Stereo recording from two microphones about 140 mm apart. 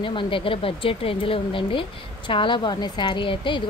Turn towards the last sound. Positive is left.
turn(degrees=35)  # may be behind; listen again after turning